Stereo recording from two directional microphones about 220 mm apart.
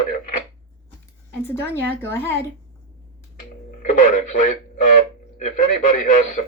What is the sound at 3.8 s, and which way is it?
Speech, 35° left (ahead or behind).